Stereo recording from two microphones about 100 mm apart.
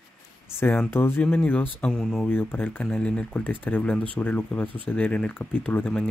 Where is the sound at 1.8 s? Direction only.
5° left (ahead or behind).